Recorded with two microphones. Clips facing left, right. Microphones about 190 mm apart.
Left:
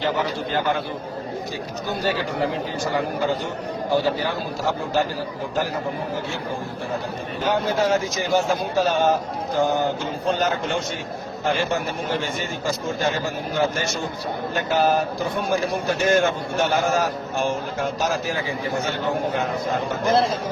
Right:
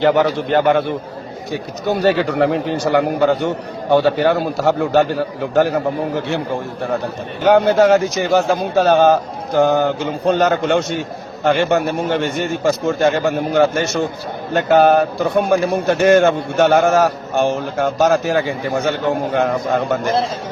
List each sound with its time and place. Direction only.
0.0 s a man's voice: 70° right (ahead or behind)
7.4 s a man's voice: 70° right (ahead or behind)